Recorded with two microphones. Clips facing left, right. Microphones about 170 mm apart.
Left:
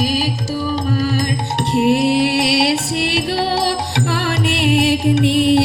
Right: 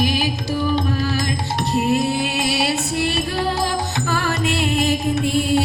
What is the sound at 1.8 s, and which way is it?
Music, 80° left.